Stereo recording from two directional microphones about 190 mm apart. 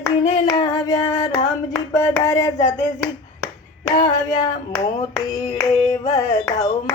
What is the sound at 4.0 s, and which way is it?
Singing, 20° left (ahead or behind).